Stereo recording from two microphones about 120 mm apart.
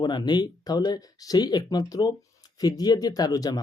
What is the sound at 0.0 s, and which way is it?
Speech, 40° left (ahead or behind).